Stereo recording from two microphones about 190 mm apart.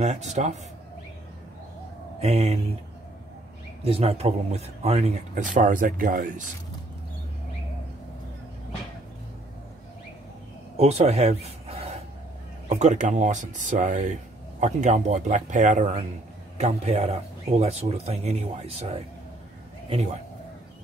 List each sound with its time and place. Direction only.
0.0 s speech: 35° right (ahead or behind)
2.1 s speech: 35° right (ahead or behind)
3.8 s speech: 30° right (ahead or behind)
10.8 s speech: 35° right (ahead or behind)